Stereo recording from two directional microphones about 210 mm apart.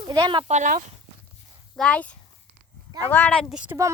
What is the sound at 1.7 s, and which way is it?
A child's voice, 5° left (ahead or behind).